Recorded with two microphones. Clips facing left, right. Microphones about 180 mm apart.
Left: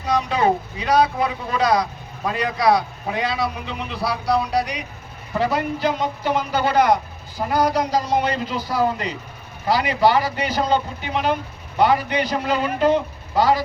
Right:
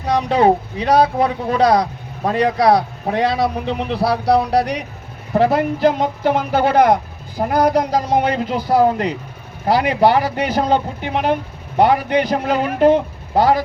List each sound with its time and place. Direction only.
0.0 s speech: 60° right (ahead or behind)